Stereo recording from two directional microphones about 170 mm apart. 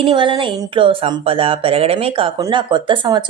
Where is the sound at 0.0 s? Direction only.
30° right (ahead or behind).